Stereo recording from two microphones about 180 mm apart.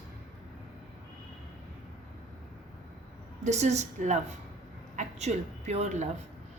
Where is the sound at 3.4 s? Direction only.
40° right (ahead or behind).